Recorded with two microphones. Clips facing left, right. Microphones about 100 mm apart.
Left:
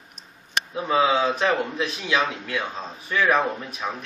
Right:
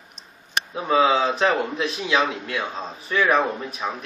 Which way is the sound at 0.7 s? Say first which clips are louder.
Right 2 dB; 15° right (ahead or behind).